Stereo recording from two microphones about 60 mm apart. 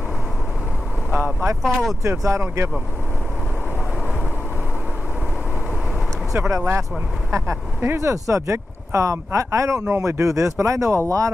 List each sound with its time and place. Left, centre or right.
1.2 s speech: right
1.6 s speech: centre
2.0 s speech: right
6.3 s speech: right